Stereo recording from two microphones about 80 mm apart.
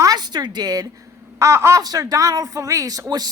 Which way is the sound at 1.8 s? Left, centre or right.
Right.